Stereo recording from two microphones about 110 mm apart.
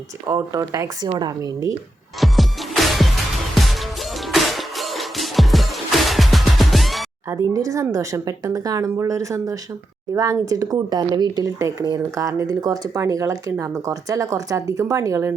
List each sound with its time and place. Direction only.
0.3 s speech: 30° right (ahead or behind)
1.0 s speech: 40° right (ahead or behind)
2.2 s music: centre (ahead or behind)
7.5 s speech: 30° right (ahead or behind)